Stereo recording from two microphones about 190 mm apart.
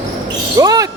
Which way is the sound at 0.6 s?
20° right (ahead or behind).